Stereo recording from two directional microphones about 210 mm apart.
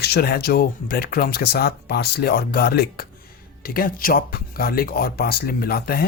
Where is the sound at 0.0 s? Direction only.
50° left (ahead or behind).